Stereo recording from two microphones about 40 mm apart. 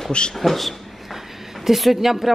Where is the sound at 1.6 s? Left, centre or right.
Centre.